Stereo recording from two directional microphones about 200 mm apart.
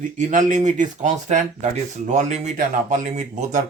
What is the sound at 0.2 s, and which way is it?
Speech, 40° right (ahead or behind).